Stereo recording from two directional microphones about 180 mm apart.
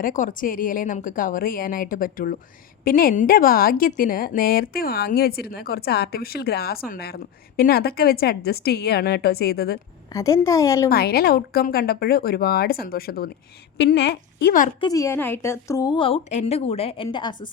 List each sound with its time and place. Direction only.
0.0 s a woman's voice: 45° left (ahead or behind)
10.1 s a woman's voice: 20° left (ahead or behind)
10.8 s a woman's voice: 60° left (ahead or behind)
13.7 s a woman's voice: 70° left (ahead or behind)
14.8 s a woman's voice: 20° left (ahead or behind)